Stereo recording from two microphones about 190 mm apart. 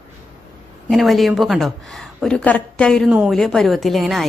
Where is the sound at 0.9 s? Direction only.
Centre (ahead or behind).